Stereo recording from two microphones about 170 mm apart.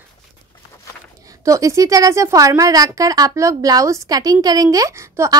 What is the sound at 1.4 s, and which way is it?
Speech, 20° right (ahead or behind).